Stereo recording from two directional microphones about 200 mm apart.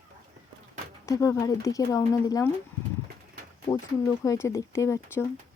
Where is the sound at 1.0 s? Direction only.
15° left (ahead or behind).